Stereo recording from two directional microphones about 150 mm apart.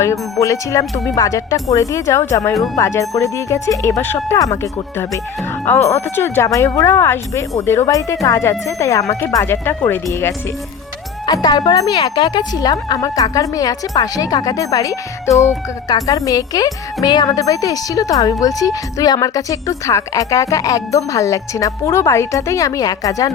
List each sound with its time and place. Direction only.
0.0 s speech: 20° left (ahead or behind)
11.3 s speech: 25° left (ahead or behind)